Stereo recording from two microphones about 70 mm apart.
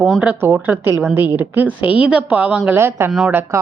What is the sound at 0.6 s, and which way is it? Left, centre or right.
A woman's voice, right.